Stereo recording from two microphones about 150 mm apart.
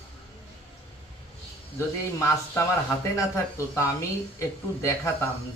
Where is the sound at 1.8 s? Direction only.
20° left (ahead or behind).